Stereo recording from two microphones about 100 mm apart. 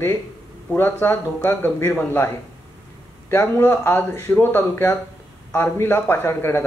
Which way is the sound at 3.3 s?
20° left (ahead or behind).